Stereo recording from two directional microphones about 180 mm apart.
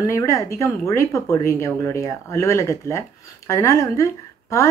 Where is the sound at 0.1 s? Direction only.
15° left (ahead or behind).